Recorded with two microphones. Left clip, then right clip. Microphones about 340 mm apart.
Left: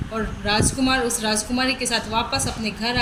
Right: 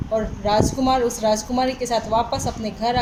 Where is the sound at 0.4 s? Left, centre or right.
Right.